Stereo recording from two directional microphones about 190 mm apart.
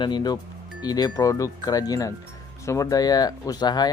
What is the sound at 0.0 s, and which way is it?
Speech, 25° left (ahead or behind).